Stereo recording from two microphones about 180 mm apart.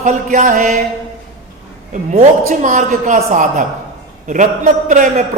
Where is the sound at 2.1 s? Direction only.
45° right (ahead or behind).